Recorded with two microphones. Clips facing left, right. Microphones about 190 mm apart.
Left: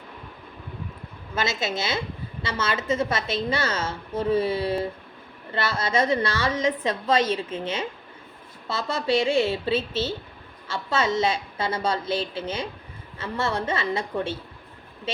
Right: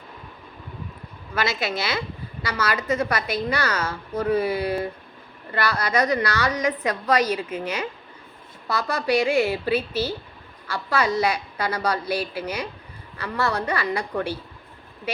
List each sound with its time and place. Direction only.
1.4 s a woman's voice: 25° left (ahead or behind)